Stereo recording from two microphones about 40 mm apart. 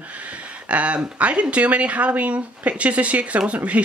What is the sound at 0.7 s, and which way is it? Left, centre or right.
Speech, right.